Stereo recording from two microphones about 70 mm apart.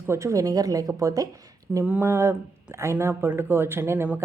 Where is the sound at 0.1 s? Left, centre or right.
Right.